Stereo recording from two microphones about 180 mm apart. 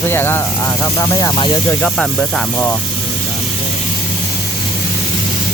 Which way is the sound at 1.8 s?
5° left (ahead or behind).